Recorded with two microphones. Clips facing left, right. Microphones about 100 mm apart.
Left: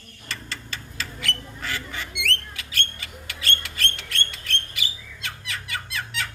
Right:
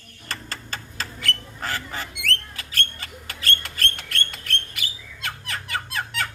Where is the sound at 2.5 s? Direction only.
40° right (ahead or behind).